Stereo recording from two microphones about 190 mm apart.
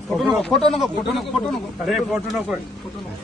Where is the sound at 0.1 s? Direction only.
Centre (ahead or behind).